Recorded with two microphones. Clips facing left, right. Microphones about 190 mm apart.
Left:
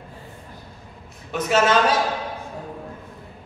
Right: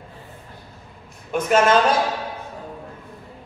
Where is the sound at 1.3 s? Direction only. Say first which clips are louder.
Right 2 dB; 50° right (ahead or behind).